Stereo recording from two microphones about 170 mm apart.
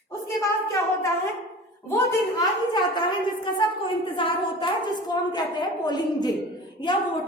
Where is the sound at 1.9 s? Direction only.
25° left (ahead or behind).